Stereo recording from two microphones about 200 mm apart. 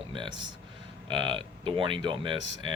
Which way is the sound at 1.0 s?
25° right (ahead or behind).